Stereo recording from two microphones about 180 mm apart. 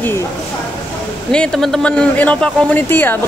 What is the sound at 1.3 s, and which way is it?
A man's voice, 5° left (ahead or behind).